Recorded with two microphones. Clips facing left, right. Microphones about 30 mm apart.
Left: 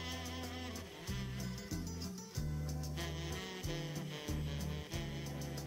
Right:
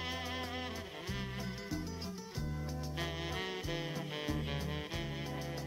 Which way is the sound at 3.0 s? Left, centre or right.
Right.